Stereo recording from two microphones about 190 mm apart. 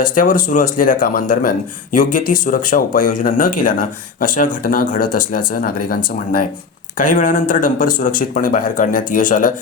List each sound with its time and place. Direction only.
0.2 s speech: 45° left (ahead or behind)